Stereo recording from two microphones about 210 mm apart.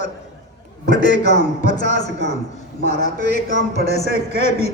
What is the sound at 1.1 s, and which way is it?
Speech, 35° left (ahead or behind).